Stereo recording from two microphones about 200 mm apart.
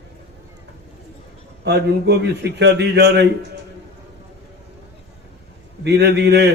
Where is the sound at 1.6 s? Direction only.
60° right (ahead or behind).